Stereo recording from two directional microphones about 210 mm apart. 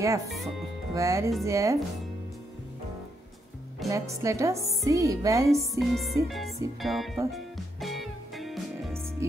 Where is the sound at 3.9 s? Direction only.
15° right (ahead or behind).